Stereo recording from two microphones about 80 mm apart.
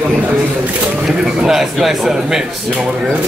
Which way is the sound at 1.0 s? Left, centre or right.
Centre.